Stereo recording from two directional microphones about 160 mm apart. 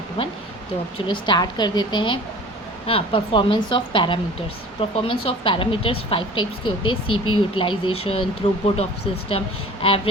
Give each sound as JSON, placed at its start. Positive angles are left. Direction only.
{"t": 0.9, "sound": "a woman's voice", "side_deg": 30}